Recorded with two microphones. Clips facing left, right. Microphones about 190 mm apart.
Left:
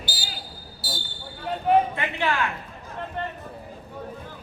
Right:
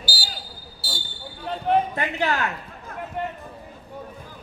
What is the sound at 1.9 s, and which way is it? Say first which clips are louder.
Speech: right 1 dB; 40° right (ahead or behind).